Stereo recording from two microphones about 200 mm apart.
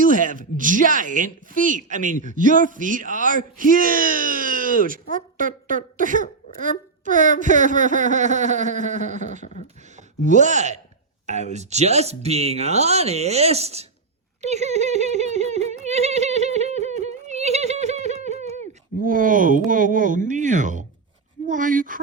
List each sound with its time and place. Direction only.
0.0 s speech: 40° right (ahead or behind)
14.4 s a sound: 35° right (ahead or behind)
19.0 s speech: 40° right (ahead or behind)